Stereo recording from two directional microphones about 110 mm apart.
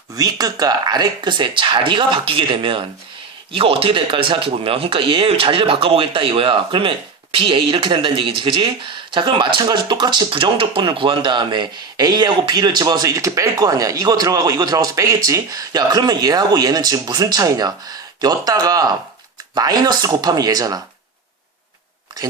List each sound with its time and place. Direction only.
0.2 s speech: 35° right (ahead or behind)